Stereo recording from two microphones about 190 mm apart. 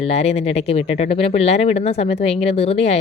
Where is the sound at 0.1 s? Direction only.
35° left (ahead or behind).